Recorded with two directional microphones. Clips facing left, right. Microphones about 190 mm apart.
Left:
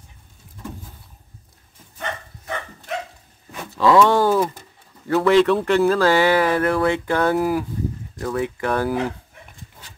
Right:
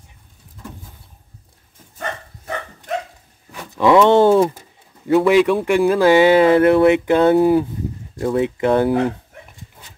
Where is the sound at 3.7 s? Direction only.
20° right (ahead or behind).